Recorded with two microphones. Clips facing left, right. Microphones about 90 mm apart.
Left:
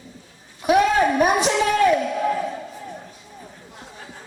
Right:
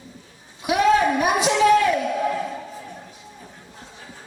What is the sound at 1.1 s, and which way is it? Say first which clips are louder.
Speech: left 2 dB; 40° left (ahead or behind).